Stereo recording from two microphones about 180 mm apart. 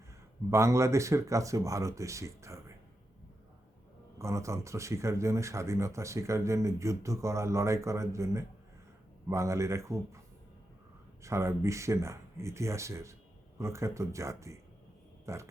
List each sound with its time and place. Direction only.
0.5 s speech: 15° right (ahead or behind)
4.2 s speech: 15° right (ahead or behind)
11.2 s speech: 15° right (ahead or behind)